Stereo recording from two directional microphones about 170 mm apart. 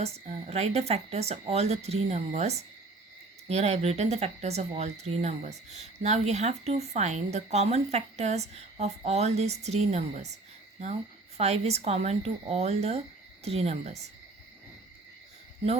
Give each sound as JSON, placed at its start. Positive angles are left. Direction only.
{"t": 0.0, "sound": "speech", "side_deg": -40}
{"t": 11.3, "sound": "speech", "side_deg": -40}